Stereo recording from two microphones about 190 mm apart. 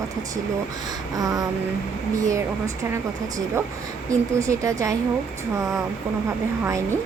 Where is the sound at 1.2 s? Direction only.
20° right (ahead or behind).